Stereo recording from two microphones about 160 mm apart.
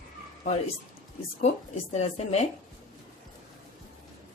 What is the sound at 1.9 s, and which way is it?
Speech, 40° left (ahead or behind).